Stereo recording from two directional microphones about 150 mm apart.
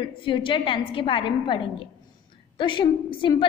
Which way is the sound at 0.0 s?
35° left (ahead or behind).